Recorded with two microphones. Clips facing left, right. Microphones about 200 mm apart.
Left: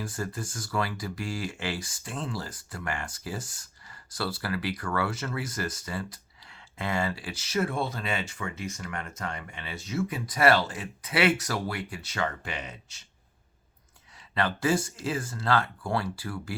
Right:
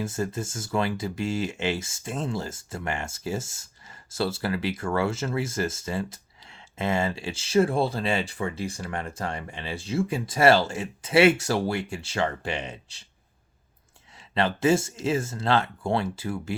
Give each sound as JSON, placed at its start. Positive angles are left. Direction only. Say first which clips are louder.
{"t": 0.0, "sound": "speech", "louder": "right 5 dB", "side_deg": -25}
{"t": 14.2, "sound": "speech", "louder": "right 4 dB", "side_deg": -25}